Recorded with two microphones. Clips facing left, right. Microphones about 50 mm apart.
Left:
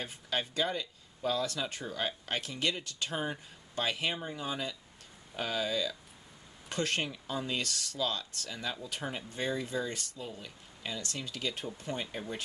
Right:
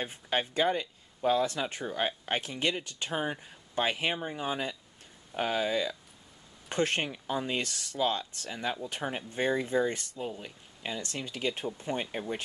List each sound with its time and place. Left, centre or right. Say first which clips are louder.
0.0 s speech: right 4 dB; right